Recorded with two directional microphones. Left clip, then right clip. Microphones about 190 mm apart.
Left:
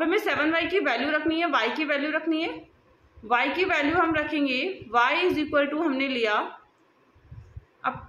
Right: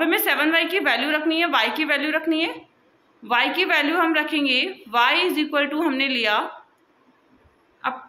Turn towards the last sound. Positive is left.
turn(degrees=-15)  # may be behind; listen again after turning